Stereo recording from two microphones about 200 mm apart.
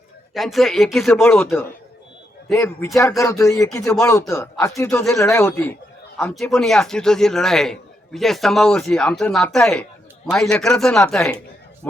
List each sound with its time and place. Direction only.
0.3 s a man's voice: centre (ahead or behind)